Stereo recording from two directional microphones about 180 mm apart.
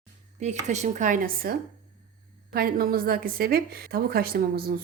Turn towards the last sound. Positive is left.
turn(degrees=-55)  # may be behind; listen again after turning